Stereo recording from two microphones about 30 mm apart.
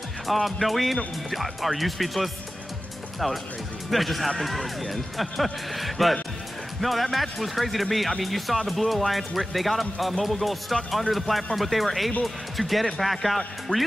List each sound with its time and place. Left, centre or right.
0.3 s speech: centre
3.9 s speech: centre
13.7 s speech: left